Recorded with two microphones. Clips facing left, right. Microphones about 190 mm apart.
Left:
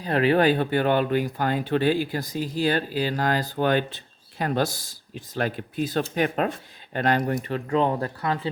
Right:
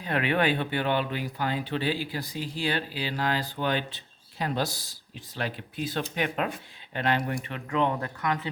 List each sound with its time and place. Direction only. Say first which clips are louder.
0.0 s speech: left 6 dB; 35° left (ahead or behind)